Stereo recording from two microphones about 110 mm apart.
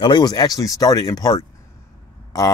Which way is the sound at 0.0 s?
40° left (ahead or behind).